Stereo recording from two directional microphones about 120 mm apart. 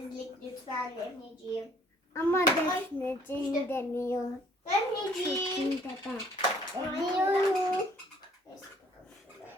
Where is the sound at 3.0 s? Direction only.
20° left (ahead or behind).